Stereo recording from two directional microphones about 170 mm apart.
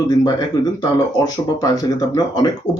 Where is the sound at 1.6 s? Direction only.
20° left (ahead or behind).